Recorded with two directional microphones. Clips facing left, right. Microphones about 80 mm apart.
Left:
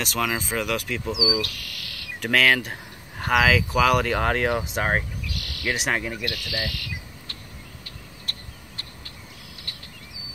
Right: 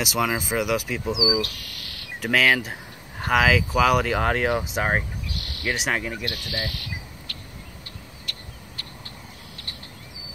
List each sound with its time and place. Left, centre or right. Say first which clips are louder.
0.0 s speech: right 2 dB; centre
1.1 s speech: right 2 dB; right
1.5 s cricket: left 1 dB; right
2.1 s speech: even; centre
5.2 s a sound: even; right
5.7 s speech: even; centre
6.2 s speech: left 1 dB; right
8.3 s vehicle: left 1 dB; left